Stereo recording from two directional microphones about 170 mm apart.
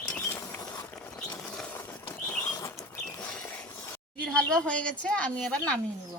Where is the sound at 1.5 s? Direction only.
10° left (ahead or behind).